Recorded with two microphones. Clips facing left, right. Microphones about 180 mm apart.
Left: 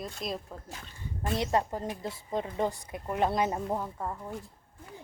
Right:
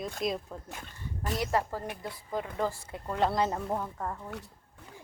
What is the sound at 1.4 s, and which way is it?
A woman's voice, 20° left (ahead or behind).